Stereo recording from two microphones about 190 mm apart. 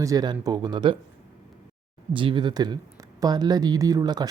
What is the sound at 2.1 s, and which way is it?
Speech, 25° right (ahead or behind).